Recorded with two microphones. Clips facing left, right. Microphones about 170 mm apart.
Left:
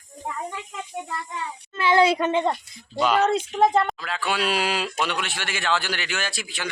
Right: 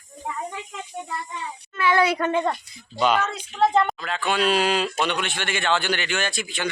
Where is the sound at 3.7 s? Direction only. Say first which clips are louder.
Right 1 dB; 5° left (ahead or behind).